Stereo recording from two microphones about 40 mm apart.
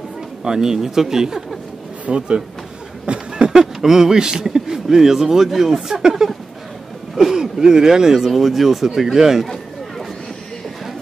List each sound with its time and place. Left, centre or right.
0.4 s speech: centre
2.0 s speech: right; by 9.5 s centre